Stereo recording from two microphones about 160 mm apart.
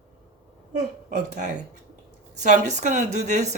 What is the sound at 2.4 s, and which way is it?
Speech, 50° right (ahead or behind).